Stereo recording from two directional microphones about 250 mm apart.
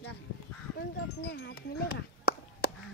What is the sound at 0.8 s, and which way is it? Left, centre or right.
Speech, left.